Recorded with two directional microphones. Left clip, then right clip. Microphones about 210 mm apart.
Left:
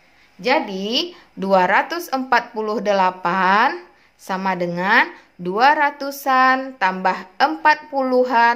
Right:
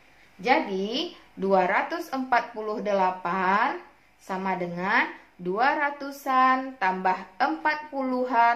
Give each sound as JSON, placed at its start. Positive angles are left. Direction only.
{"t": 0.4, "sound": "a woman's voice", "side_deg": 40}